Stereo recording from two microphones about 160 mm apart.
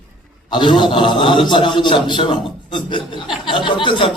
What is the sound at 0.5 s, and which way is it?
A man's voice, 30° left (ahead or behind).